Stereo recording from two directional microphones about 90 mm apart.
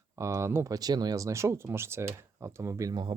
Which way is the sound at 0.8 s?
45° right (ahead or behind).